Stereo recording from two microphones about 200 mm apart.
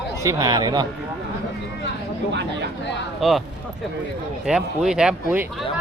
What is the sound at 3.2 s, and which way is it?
Speech, centre (ahead or behind).